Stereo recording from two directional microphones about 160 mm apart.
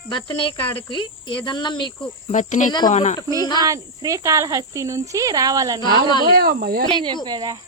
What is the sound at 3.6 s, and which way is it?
Speech, 20° right (ahead or behind).